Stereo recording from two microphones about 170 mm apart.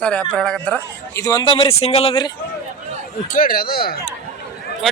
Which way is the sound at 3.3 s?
55° left (ahead or behind).